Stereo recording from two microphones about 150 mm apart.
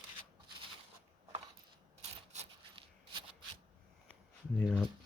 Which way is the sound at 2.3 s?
50° right (ahead or behind).